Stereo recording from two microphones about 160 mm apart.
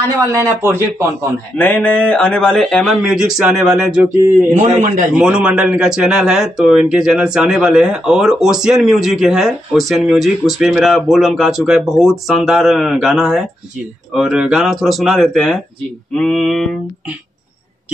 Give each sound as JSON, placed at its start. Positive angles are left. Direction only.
{"t": 0.3, "sound": "a man's voice", "side_deg": -15}
{"t": 1.6, "sound": "speech", "side_deg": 10}
{"t": 4.6, "sound": "a man's voice", "side_deg": -50}
{"t": 5.2, "sound": "speech", "side_deg": -5}